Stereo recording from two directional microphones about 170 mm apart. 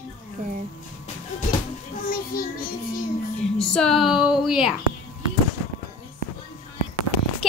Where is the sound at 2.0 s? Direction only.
60° left (ahead or behind).